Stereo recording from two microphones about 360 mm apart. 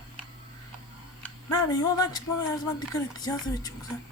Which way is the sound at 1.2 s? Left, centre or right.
Centre.